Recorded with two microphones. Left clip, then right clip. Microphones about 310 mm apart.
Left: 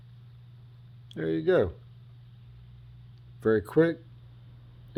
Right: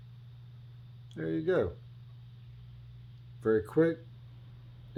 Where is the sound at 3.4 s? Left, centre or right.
Left.